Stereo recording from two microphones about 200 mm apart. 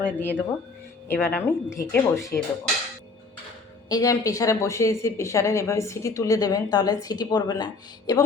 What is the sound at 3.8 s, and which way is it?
Speech, 20° left (ahead or behind).